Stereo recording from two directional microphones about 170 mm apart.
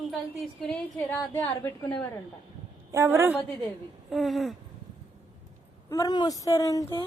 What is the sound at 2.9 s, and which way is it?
Speech, 15° right (ahead or behind).